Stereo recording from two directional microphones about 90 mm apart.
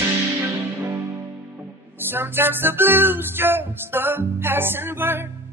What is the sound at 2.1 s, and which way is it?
Music, 25° right (ahead or behind).